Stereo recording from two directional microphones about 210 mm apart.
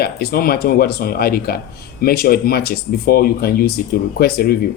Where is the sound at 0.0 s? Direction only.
45° left (ahead or behind).